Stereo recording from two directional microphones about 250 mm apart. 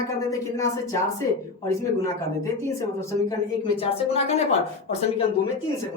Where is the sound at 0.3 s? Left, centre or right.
Centre.